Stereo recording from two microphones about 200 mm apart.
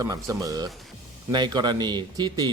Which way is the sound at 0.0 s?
15° right (ahead or behind).